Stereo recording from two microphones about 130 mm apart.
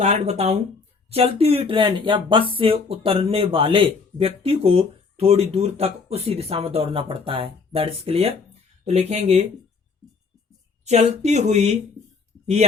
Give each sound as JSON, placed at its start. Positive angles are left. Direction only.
{"t": 0.0, "sound": "speech", "side_deg": -55}
{"t": 10.8, "sound": "speech", "side_deg": -60}